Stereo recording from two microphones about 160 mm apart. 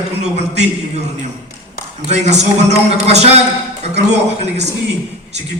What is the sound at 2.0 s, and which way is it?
A man's voice, 45° right (ahead or behind).